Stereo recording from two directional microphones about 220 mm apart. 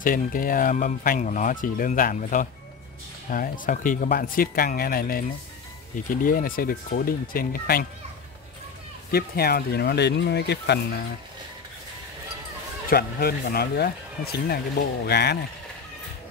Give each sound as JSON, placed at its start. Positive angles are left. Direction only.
{"t": 0.0, "sound": "speech", "side_deg": 40}
{"t": 9.1, "sound": "speech", "side_deg": 45}
{"t": 12.9, "sound": "speech", "side_deg": 45}